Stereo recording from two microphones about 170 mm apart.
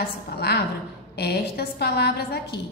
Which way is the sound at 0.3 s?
70° left (ahead or behind).